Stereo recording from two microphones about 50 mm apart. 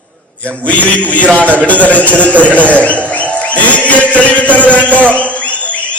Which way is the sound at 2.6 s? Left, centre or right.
Left.